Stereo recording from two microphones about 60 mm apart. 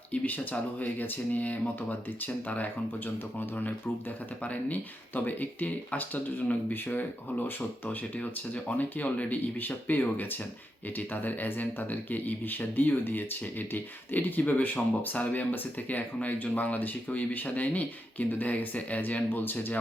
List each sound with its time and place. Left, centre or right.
0.1 s speech: left